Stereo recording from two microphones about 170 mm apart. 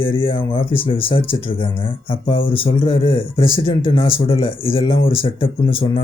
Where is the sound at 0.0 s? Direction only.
30° left (ahead or behind).